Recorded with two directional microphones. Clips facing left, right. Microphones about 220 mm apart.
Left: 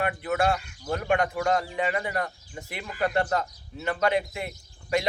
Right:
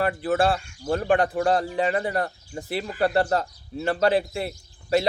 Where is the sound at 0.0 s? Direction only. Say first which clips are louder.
Right 4 dB; 30° right (ahead or behind).